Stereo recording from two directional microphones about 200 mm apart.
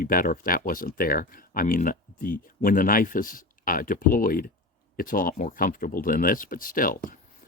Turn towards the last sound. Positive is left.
turn(degrees=45)  # may be behind; listen again after turning